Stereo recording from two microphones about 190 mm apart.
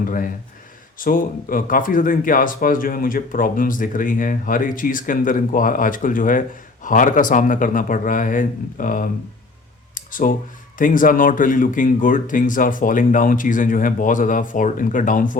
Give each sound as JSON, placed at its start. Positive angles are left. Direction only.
{"t": 0.9, "sound": "speech", "side_deg": 50}
{"t": 9.9, "sound": "a sound", "side_deg": 45}
{"t": 10.8, "sound": "speech", "side_deg": 45}